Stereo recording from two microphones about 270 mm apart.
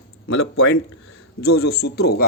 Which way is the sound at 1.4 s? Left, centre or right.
Left.